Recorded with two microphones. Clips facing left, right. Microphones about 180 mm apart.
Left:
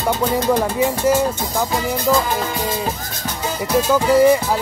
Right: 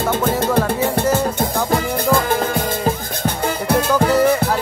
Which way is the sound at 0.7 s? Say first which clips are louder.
Left 1 dB; 60° right (ahead or behind).